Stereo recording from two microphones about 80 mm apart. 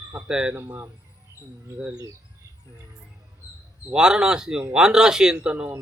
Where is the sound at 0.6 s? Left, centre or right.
Right.